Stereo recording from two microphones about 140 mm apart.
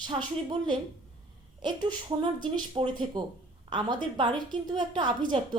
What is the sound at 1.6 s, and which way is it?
Speech, 30° right (ahead or behind).